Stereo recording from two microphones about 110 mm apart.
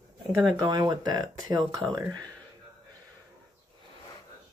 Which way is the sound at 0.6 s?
40° right (ahead or behind).